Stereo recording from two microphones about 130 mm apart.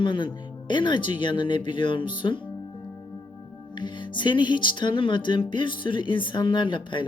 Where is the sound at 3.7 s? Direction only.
35° left (ahead or behind).